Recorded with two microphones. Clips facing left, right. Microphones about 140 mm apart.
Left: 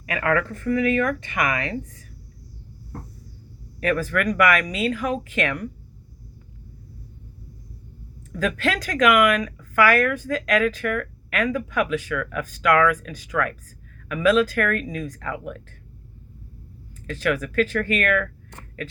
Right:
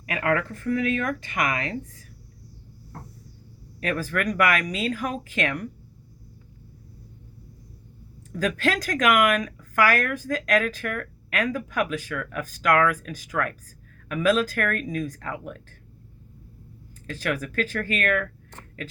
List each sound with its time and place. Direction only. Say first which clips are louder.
0.2 s speech: left 2 dB; 30° right (ahead or behind)
3.8 s speech: left 4 dB; 35° right (ahead or behind)
8.3 s speech: left 1 dB; 40° right (ahead or behind)
17.1 s speech: left 4 dB; 40° right (ahead or behind)